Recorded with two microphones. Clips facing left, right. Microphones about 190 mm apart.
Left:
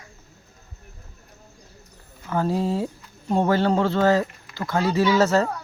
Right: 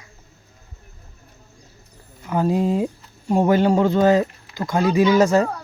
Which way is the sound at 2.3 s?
15° right (ahead or behind).